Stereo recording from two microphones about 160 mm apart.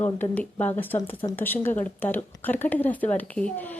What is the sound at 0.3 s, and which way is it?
A woman's voice, 10° left (ahead or behind).